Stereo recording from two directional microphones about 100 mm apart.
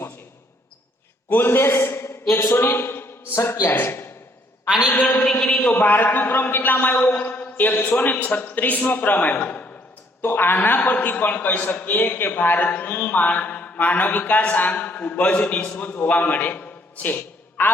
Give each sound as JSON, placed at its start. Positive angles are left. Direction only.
{"t": 1.3, "sound": "a man's voice", "side_deg": 20}